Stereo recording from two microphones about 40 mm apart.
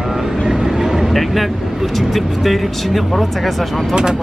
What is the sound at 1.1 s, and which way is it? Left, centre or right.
Speech, centre.